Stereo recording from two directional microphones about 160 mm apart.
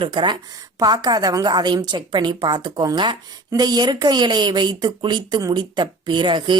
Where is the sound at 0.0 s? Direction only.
30° right (ahead or behind).